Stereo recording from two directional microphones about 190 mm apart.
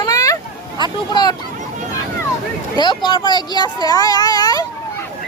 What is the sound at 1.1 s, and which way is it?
Speech, 20° left (ahead or behind).